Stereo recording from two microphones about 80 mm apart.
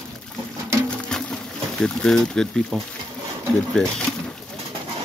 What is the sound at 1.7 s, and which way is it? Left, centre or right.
Speech, centre.